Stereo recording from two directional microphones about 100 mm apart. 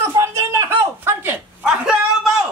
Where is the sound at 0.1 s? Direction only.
30° right (ahead or behind).